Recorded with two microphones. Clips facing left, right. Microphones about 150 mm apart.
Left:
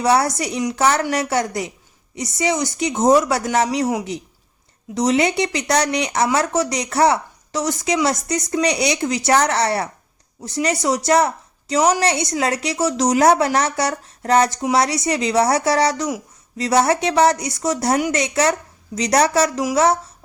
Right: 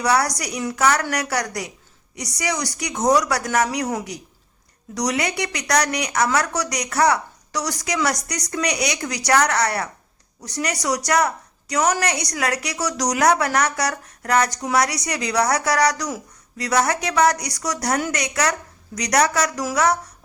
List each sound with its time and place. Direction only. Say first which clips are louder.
0.0 s a woman's voice: left 3 dB; 25° left (ahead or behind)
4.9 s a woman's voice: left 6 dB; 25° left (ahead or behind)